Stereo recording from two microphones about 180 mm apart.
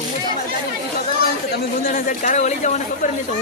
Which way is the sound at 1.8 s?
50° left (ahead or behind).